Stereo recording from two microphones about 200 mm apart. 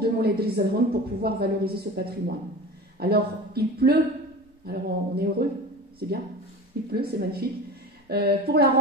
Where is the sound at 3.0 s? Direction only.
50° right (ahead or behind).